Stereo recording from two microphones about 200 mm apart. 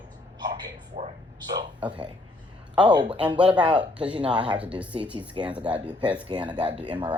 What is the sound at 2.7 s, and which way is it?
A man's voice, 20° right (ahead or behind).